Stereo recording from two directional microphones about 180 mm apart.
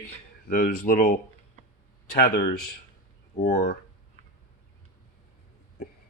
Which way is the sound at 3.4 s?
50° left (ahead or behind).